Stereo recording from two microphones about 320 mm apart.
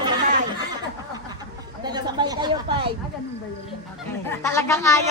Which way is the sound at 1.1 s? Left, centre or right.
Centre.